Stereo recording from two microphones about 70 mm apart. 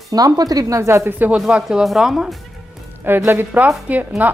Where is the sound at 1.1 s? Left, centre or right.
Right.